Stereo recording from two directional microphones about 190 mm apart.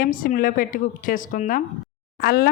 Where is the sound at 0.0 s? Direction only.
45° left (ahead or behind).